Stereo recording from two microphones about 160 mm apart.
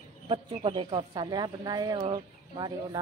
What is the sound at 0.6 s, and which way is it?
Speech, 30° right (ahead or behind).